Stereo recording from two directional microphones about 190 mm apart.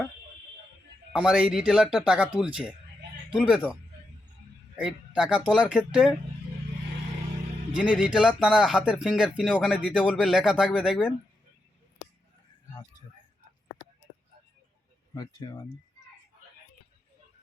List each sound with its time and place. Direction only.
1.1 s speech: 5° right (ahead or behind)
4.8 s speech: 5° right (ahead or behind)
7.8 s speech: 5° right (ahead or behind)
15.1 s speech: 20° left (ahead or behind)